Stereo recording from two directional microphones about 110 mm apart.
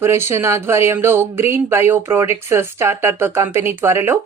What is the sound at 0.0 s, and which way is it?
Speech, 20° right (ahead or behind).